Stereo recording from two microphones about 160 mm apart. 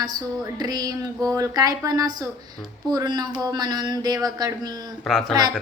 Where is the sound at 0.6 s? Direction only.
25° right (ahead or behind).